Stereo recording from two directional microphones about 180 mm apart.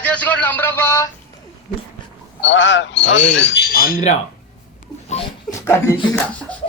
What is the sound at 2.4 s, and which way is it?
A man's voice, 90° left.